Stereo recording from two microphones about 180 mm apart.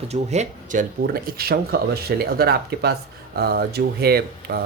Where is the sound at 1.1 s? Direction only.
55° right (ahead or behind).